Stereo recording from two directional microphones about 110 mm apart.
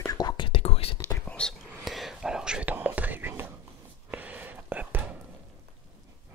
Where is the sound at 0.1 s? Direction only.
35° left (ahead or behind).